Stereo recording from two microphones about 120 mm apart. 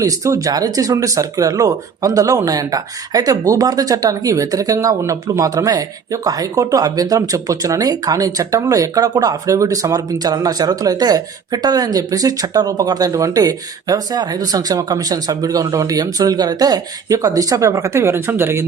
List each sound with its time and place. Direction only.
0.0 s speech: 30° right (ahead or behind)